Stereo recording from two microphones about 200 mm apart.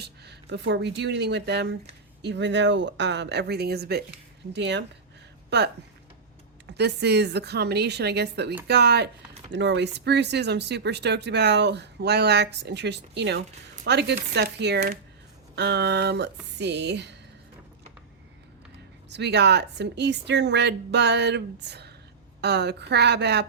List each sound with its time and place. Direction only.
0.0 s speech: 55° right (ahead or behind)
19.1 s speech: 55° right (ahead or behind)